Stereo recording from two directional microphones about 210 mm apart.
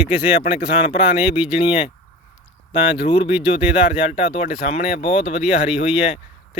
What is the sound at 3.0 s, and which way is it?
Music, 25° left (ahead or behind).